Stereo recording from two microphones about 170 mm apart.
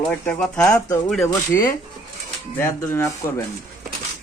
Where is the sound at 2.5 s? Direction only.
15° left (ahead or behind).